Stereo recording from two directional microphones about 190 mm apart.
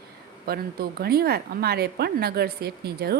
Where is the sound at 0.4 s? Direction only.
55° right (ahead or behind).